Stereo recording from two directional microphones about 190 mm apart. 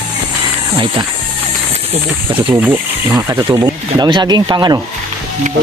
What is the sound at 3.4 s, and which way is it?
Speech, 20° right (ahead or behind).